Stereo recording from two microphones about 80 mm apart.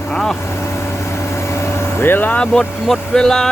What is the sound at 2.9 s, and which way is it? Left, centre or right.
Vehicle, centre.